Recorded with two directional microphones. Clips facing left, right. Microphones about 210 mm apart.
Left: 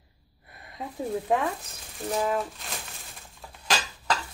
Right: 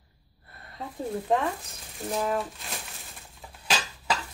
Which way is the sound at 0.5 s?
15° left (ahead or behind).